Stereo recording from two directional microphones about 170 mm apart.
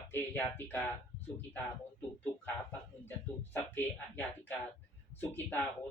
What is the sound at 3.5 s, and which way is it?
Speech, 10° left (ahead or behind).